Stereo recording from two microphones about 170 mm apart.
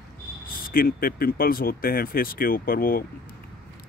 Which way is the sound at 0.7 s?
60° left (ahead or behind).